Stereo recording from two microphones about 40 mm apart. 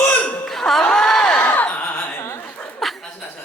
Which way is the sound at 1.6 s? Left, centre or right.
Left.